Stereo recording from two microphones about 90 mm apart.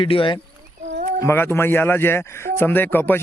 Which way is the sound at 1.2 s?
25° left (ahead or behind).